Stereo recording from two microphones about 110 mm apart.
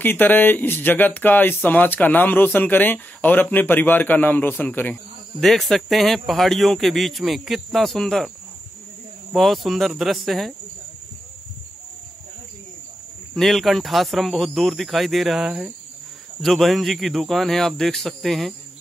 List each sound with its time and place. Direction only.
0.0 s speech: 15° left (ahead or behind)
5.4 s a man's voice: centre (ahead or behind)
9.3 s a man's voice: centre (ahead or behind)
13.3 s a man's voice: centre (ahead or behind)